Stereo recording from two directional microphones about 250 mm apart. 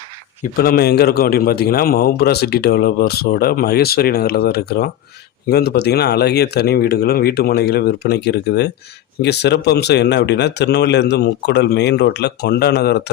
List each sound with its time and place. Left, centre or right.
0.5 s a man's voice: left